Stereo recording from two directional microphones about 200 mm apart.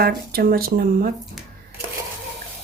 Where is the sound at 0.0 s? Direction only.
50° right (ahead or behind).